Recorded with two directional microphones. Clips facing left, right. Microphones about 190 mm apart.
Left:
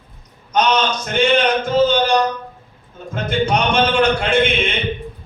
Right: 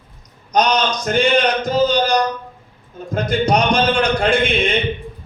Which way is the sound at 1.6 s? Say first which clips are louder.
Left 1 dB; 35° right (ahead or behind).